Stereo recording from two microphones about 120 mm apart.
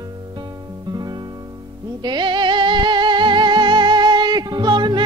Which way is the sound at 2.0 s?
40° right (ahead or behind).